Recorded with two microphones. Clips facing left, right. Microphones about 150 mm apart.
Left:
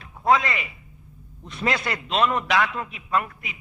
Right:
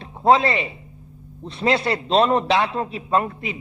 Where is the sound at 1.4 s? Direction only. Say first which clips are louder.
Right 6 dB; 30° right (ahead or behind).